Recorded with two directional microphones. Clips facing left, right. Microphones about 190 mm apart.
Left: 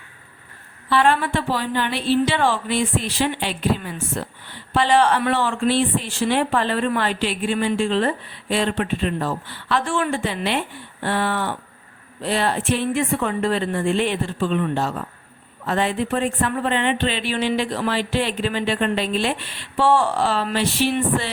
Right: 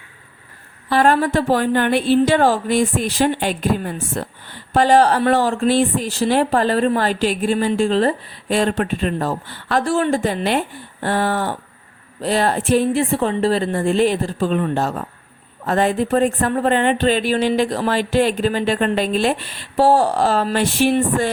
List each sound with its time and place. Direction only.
0.9 s a woman's voice: 40° right (ahead or behind)